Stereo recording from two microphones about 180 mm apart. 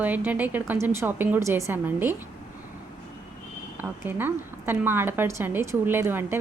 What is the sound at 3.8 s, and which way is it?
A woman's voice, 10° right (ahead or behind).